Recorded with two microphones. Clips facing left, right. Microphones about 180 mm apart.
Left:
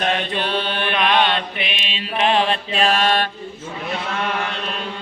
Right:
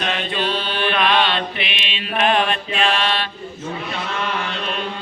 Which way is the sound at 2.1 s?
25° left (ahead or behind).